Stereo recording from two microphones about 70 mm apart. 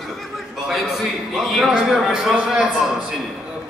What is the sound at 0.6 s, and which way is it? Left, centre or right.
A man's voice, centre.